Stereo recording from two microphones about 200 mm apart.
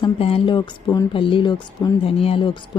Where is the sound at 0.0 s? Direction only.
30° left (ahead or behind).